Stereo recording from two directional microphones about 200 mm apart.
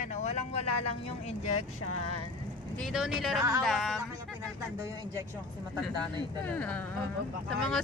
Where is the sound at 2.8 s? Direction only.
Centre (ahead or behind).